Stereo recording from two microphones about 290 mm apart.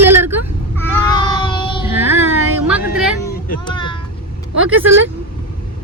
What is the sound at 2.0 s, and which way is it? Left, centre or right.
Speech, centre.